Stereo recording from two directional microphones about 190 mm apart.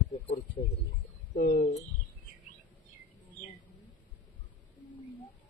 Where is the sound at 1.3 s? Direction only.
45° left (ahead or behind).